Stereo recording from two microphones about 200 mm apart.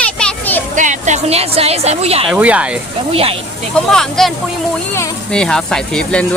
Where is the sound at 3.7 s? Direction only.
5° left (ahead or behind).